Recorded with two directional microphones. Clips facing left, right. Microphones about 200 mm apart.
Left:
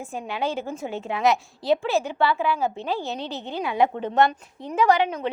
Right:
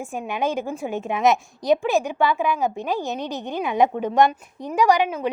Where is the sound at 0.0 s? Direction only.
15° right (ahead or behind).